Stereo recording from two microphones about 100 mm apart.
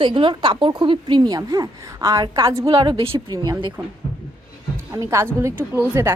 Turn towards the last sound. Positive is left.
turn(degrees=-20)  # may be behind; listen again after turning